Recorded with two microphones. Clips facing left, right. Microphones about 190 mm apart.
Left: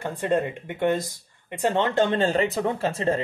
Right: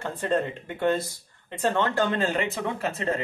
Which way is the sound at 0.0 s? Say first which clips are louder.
Left 2 dB; 15° left (ahead or behind).